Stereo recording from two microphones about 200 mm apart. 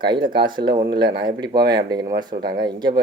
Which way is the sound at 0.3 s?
25° right (ahead or behind).